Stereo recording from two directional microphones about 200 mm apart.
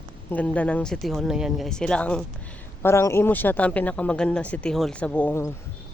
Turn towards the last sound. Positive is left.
turn(degrees=10)  # may be behind; listen again after turning